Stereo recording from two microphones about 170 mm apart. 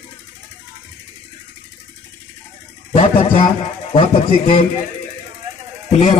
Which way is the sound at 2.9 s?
35° left (ahead or behind).